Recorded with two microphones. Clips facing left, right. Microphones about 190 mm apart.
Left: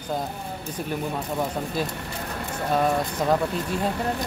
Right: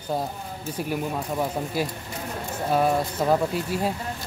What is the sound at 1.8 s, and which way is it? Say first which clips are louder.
Speech: even; 10° right (ahead or behind).